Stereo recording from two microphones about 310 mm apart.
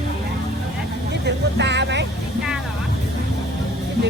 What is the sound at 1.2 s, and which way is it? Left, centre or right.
Speech, right.